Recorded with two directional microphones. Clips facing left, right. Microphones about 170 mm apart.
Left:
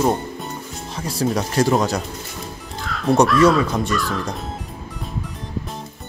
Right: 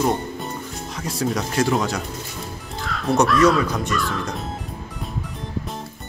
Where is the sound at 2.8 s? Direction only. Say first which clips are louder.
Left 3 dB; centre (ahead or behind).